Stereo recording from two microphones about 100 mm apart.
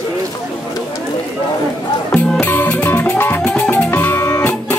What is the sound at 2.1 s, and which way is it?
Music, 15° left (ahead or behind).